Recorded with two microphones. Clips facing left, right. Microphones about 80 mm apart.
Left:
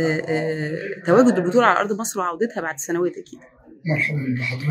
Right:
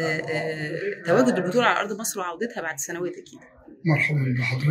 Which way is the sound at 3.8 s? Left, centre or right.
Right.